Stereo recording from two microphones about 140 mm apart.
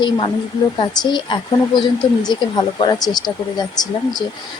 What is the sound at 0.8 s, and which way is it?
Speech, 35° left (ahead or behind).